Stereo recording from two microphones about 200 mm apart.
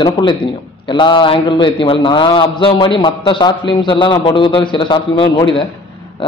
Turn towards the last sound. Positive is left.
turn(degrees=25)  # may be behind; listen again after turning